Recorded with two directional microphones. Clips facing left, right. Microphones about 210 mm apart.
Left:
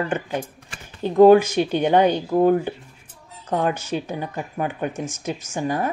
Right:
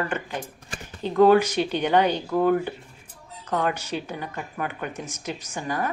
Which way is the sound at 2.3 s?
35° left (ahead or behind).